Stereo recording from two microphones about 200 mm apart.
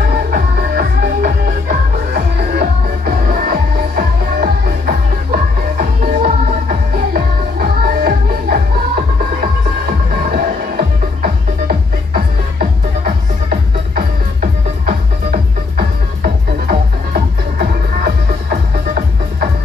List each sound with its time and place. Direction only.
0.1 s music: 50° right (ahead or behind)